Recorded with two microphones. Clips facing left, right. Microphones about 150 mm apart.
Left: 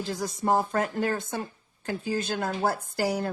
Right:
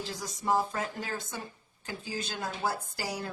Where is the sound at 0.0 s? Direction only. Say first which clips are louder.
Left 6 dB; 55° left (ahead or behind).